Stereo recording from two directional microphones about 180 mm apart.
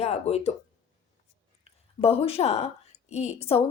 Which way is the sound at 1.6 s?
35° left (ahead or behind).